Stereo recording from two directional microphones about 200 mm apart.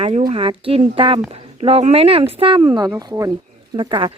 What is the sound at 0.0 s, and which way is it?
Speech, 35° right (ahead or behind).